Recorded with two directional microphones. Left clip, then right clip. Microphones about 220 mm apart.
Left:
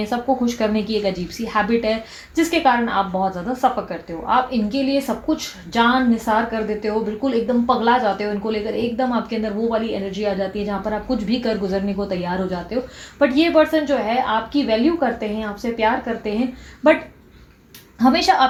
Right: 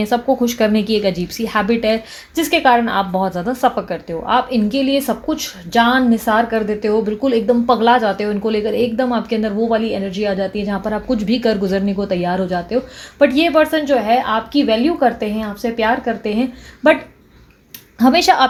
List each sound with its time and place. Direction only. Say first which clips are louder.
0.0 s a woman's voice: right 5 dB; 50° right (ahead or behind)
18.0 s a woman's voice: right 3 dB; 50° right (ahead or behind)